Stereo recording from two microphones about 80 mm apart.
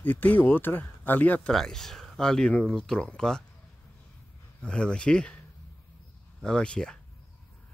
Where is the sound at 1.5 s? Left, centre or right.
Centre.